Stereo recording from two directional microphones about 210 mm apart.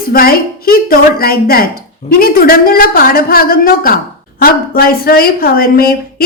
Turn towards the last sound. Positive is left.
turn(degrees=45)  # may be behind; listen again after turning